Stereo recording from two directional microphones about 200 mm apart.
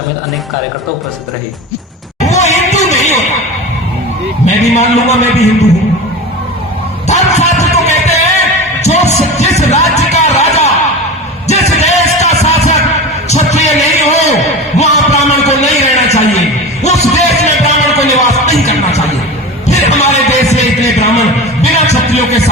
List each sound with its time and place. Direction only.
2.2 s a sound: 35° left (ahead or behind)
4.4 s a man's voice: 35° left (ahead or behind)
7.1 s music: 35° left (ahead or behind)
13.2 s a sound: 35° left (ahead or behind)
16.8 s music: 35° left (ahead or behind)
19.6 s heart sounds: 35° left (ahead or behind)